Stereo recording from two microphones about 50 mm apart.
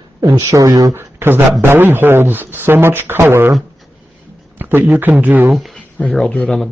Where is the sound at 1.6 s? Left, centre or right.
Right.